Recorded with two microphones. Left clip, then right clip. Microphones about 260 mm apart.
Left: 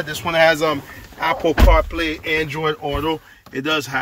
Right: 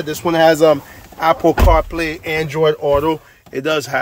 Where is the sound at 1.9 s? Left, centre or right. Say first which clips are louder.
Right 1 dB; right.